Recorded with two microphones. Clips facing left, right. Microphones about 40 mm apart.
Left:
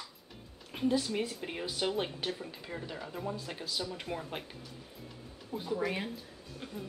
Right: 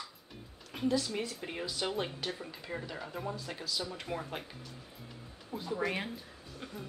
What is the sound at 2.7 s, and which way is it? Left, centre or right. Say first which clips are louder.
A woman's voice: right 1 dB; centre.